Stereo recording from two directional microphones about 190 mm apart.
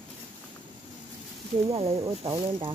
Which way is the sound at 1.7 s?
30° right (ahead or behind).